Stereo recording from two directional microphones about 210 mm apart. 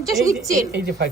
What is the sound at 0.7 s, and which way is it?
Speech, 50° right (ahead or behind).